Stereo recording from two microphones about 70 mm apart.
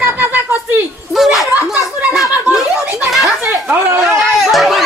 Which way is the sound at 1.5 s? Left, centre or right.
Right.